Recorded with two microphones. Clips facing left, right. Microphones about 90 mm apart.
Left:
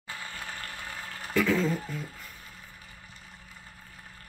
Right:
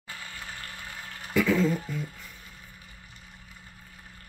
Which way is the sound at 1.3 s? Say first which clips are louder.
Right 2 dB; centre (ahead or behind).